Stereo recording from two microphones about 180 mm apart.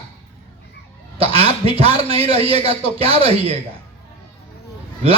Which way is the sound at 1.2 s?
35° right (ahead or behind).